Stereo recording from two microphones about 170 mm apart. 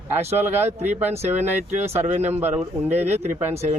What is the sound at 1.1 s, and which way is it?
Speech, 40° right (ahead or behind).